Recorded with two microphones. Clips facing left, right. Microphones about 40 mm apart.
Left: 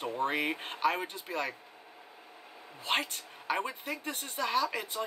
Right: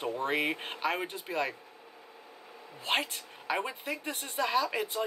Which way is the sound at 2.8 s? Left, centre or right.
Centre.